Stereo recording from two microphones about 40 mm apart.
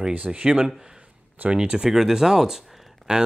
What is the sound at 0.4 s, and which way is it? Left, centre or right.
Speech, right.